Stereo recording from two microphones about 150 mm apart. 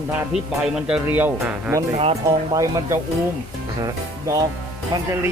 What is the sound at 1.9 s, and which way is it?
Speech, 40° right (ahead or behind).